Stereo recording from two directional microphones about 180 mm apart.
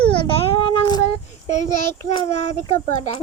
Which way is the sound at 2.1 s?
30° left (ahead or behind).